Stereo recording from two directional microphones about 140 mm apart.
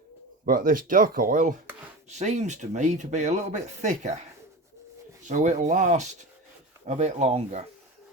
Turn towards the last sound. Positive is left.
turn(degrees=-50)  # may be behind; listen again after turning